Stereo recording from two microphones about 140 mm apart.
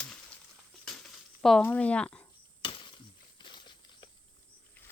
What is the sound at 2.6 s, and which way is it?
Chop, 35° left (ahead or behind).